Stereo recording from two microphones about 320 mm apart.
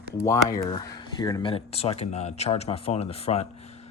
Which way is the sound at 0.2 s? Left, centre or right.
Centre.